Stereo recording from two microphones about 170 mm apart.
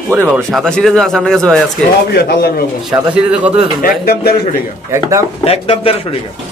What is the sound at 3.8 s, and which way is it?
Speech, 60° left (ahead or behind).